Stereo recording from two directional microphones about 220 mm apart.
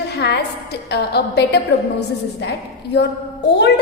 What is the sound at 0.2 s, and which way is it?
A woman's voice, 45° left (ahead or behind).